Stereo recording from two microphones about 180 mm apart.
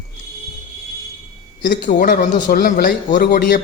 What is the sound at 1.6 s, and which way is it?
A man's voice, 50° left (ahead or behind).